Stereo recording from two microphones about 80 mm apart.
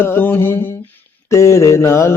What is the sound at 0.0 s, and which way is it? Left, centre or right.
Mantra, left.